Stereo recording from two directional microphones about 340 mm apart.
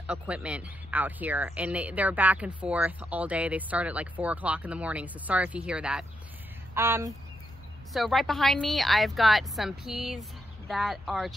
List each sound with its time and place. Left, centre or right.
0.0 s speech: centre